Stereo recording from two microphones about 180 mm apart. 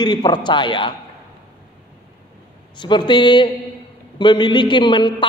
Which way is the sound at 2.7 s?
25° left (ahead or behind).